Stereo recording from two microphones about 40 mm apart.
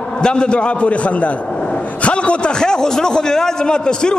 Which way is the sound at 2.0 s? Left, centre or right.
Left.